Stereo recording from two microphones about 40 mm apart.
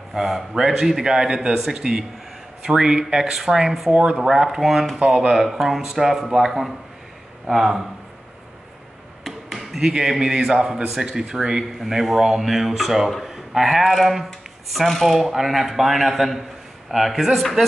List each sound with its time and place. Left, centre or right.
0.1 s speech: centre
3.9 s speech: right
4.5 s speech: centre
4.9 s speech: right
5.3 s speech: centre
9.2 s chop: centre
9.8 s speech: centre